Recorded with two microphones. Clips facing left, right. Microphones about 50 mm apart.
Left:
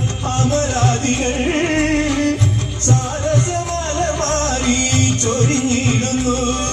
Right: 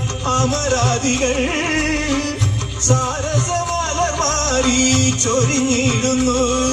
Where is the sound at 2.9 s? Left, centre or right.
Right.